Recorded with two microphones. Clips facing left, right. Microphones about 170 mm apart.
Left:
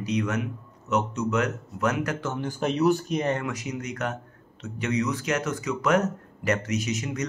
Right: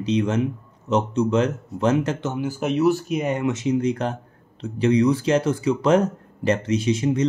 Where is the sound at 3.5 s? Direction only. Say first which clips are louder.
Right 11 dB; 25° right (ahead or behind).